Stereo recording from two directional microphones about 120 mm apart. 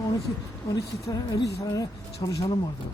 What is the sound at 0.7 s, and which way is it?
Speech, 30° left (ahead or behind).